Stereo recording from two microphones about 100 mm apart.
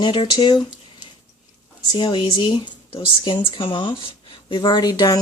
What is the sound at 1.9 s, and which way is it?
Speech, 50° left (ahead or behind).